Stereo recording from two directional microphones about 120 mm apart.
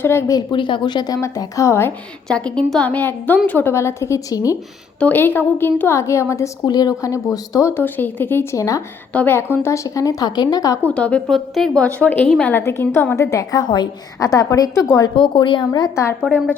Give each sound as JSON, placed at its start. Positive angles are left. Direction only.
{"t": 0.0, "sound": "a woman's voice", "side_deg": 20}
{"t": 0.3, "sound": "a woman's voice", "side_deg": 40}
{"t": 2.2, "sound": "a woman's voice", "side_deg": 10}
{"t": 4.9, "sound": "a woman's voice", "side_deg": 15}
{"t": 10.8, "sound": "a woman's voice", "side_deg": 10}
{"t": 13.1, "sound": "a woman's voice", "side_deg": 25}